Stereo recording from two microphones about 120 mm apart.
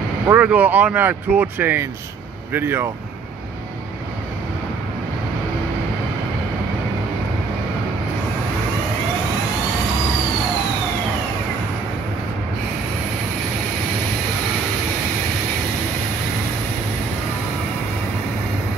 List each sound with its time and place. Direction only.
0.3 s speech: 15° right (ahead or behind)